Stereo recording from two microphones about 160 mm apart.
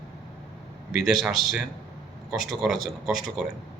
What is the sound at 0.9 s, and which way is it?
Speech, centre (ahead or behind).